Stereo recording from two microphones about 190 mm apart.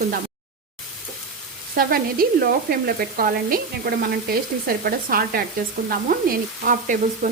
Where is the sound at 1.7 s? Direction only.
50° right (ahead or behind).